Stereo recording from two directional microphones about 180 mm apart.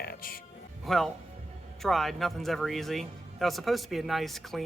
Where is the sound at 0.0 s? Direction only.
55° left (ahead or behind).